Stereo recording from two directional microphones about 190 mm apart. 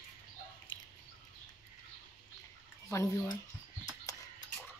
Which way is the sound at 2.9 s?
15° left (ahead or behind).